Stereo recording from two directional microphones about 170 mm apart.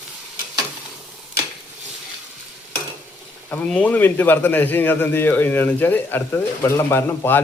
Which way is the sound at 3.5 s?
10° left (ahead or behind).